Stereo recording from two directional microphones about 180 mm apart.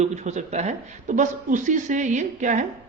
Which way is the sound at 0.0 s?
40° right (ahead or behind).